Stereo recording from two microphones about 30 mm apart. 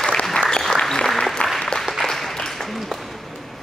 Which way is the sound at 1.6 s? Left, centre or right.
Left.